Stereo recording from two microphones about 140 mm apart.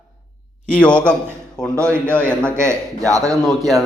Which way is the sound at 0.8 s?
10° left (ahead or behind).